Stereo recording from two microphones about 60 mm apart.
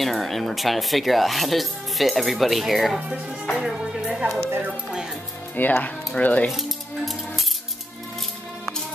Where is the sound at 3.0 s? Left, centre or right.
Centre.